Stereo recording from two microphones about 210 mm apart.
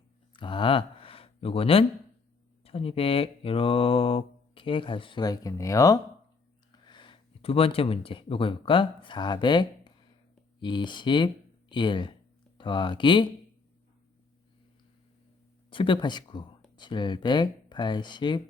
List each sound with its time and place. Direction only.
0.3 s speech: 25° left (ahead or behind)
2.6 s mantra: 25° left (ahead or behind)
6.8 s speech: 20° left (ahead or behind)
10.6 s mantra: 20° left (ahead or behind)
15.7 s mantra: 25° left (ahead or behind)